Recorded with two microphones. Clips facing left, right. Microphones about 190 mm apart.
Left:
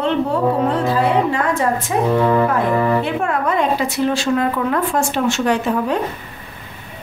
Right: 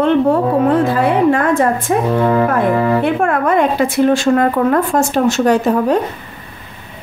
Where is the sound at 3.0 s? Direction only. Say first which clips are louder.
Right 5 dB; 55° right (ahead or behind).